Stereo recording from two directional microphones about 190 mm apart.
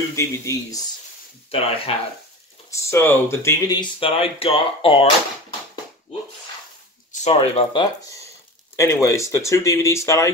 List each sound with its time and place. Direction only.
0.1 s speech: 15° left (ahead or behind)
1.5 s speech: 30° left (ahead or behind)
2.7 s speech: 15° left (ahead or behind); by 5.0 s 30° left (ahead or behind)
7.1 s speech: 35° left (ahead or behind); by 10.3 s 15° left (ahead or behind)